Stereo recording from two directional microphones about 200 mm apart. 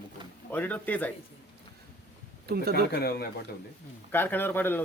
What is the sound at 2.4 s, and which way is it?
Speech, 50° right (ahead or behind).